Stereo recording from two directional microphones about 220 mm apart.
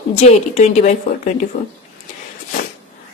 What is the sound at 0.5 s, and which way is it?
Speech, 30° left (ahead or behind).